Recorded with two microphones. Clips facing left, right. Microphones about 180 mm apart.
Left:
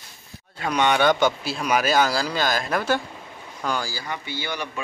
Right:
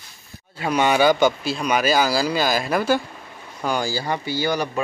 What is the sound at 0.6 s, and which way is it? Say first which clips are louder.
A man's voice: right 2 dB; 5° right (ahead or behind).